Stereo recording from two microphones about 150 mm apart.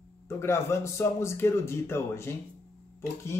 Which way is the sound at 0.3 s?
15° left (ahead or behind).